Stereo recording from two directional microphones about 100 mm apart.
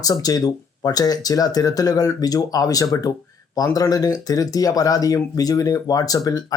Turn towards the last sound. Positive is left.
turn(degrees=35)  # may be behind; listen again after turning